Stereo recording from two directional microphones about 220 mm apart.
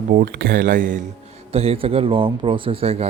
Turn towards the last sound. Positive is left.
turn(degrees=-25)  # may be behind; listen again after turning